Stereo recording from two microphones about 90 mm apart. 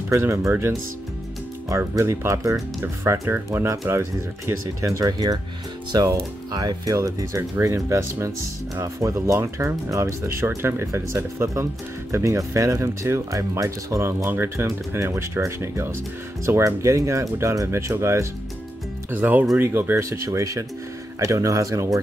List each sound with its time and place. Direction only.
0.1 s speech: 35° right (ahead or behind)
2.0 s speech: 35° right (ahead or behind)
19.0 s speech: 20° right (ahead or behind); by 22.0 s 40° right (ahead or behind)